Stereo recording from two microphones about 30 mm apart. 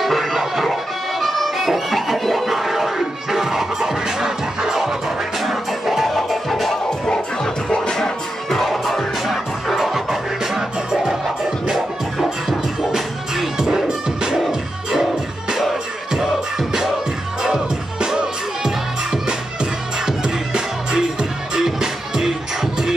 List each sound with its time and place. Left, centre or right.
0.0 s music: centre
5.4 s music: centre
7.7 s music: left
8.5 s music: centre
10.4 s music: right
11.7 s music: centre
13.6 s music: centre
16.1 s music: centre
18.0 s music: right